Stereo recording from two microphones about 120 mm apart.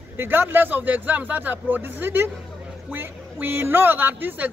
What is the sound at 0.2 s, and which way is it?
Speech, 15° right (ahead or behind).